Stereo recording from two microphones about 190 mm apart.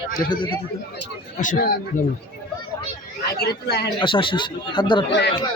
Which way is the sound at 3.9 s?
25° left (ahead or behind).